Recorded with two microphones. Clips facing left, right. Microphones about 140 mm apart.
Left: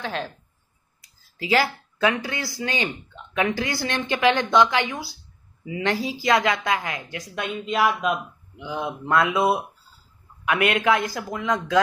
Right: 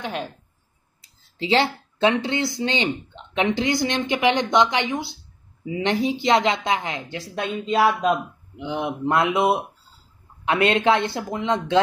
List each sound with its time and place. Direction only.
0.0 s speech: 15° right (ahead or behind)
1.0 s speech: 25° right (ahead or behind)
8.5 s speech: 25° right (ahead or behind)